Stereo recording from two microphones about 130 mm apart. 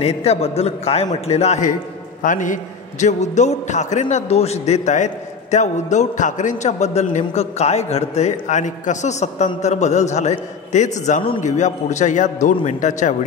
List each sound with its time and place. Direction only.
0.0 s a man's voice: 50° left (ahead or behind); by 1.8 s 70° left (ahead or behind)
2.2 s a man's voice: 80° left